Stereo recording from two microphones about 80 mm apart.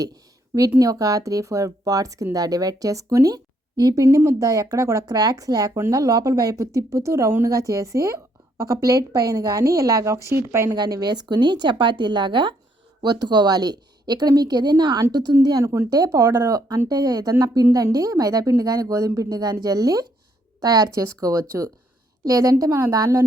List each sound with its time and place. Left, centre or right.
0.8 s speech: right
10.7 s a woman's voice: right
13.0 s a woman's voice: right
15.4 s speech: right
16.9 s speech: right
20.9 s speech: right